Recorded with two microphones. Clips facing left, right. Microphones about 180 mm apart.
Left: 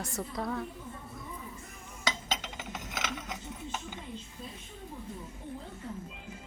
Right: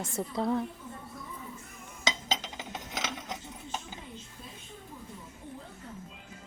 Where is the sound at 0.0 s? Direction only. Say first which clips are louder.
Right 4 dB; 25° right (ahead or behind).